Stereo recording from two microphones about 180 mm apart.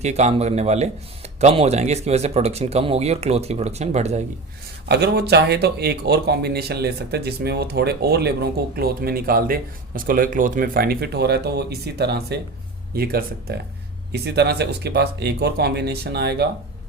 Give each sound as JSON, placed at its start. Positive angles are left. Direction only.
{"t": 0.0, "sound": "speech", "side_deg": -40}
{"t": 4.9, "sound": "speech", "side_deg": -65}